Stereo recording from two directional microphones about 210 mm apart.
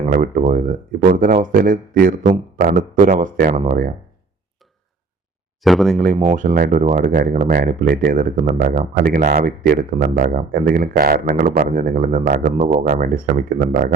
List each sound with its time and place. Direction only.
0.0 s speech: 40° right (ahead or behind)
5.6 s speech: centre (ahead or behind)
6.1 s speech: 35° right (ahead or behind)